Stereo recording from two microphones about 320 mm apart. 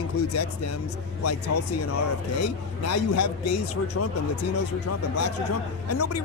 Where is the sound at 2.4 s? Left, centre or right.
Left.